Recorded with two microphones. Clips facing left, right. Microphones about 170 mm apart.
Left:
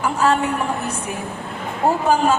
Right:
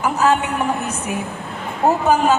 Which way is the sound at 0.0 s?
5° right (ahead or behind).